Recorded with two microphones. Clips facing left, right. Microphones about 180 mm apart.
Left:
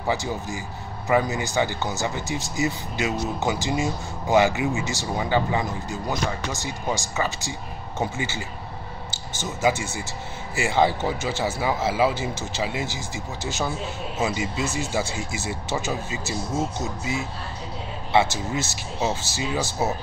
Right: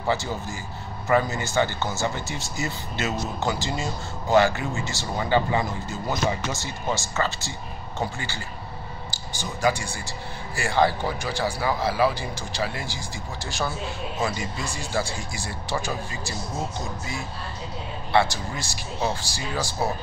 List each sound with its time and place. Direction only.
0.0 s speech: 15° left (ahead or behind)